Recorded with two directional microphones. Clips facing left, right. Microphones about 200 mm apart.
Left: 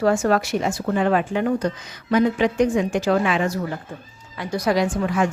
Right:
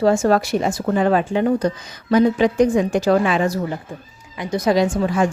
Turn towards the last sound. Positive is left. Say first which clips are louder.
# right 3 dB
turn(degrees=-30)  # may be behind; listen again after turning